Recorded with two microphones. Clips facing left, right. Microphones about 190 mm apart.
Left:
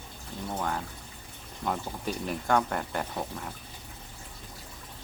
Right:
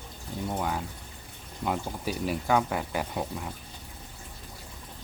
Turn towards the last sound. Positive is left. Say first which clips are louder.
# right 2 dB
turn(degrees=-10)  # may be behind; listen again after turning